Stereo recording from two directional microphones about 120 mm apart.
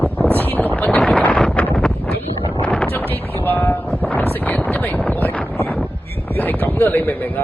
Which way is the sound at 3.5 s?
15° left (ahead or behind).